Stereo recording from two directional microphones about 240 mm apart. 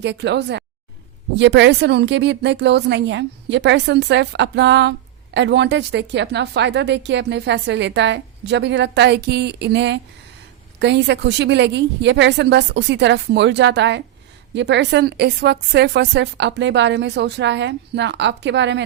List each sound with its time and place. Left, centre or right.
0.0 s a woman's voice: right